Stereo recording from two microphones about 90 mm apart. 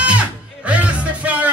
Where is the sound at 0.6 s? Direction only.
15° right (ahead or behind).